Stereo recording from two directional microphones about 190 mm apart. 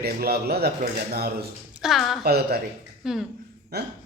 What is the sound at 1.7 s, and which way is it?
Speech, centre (ahead or behind).